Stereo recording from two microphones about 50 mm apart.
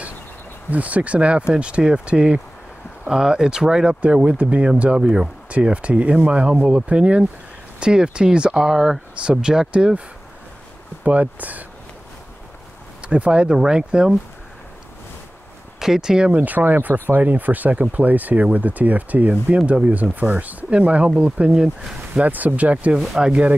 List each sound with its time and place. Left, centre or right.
0.7 s speech: right; by 5.3 s centre
5.5 s speech: right
11.1 s speech: right
13.0 s speech: right
15.8 s speech: centre
16.3 s speech: right
22.2 s speech: right